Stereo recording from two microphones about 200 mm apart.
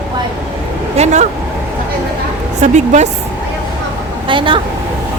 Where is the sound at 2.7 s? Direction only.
35° right (ahead or behind).